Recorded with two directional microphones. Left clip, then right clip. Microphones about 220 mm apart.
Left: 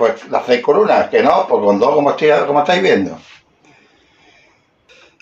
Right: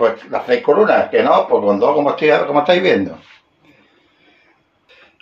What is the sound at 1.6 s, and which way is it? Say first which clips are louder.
Speech: left 2 dB; 20° left (ahead or behind).